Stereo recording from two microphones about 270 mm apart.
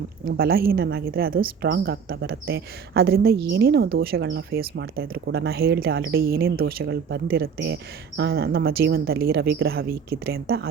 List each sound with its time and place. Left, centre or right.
0.3 s speech: right